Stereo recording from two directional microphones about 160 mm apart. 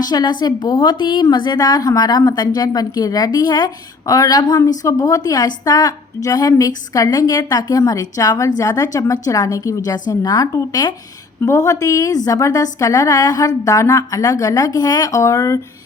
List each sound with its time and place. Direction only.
0.0 s a woman's voice: 25° left (ahead or behind)